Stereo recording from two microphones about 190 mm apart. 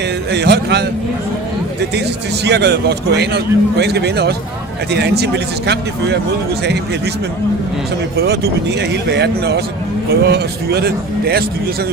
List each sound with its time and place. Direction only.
0.3 s speech: 60° right (ahead or behind)
2.4 s speech: 60° right (ahead or behind)
8.1 s speech: 60° right (ahead or behind)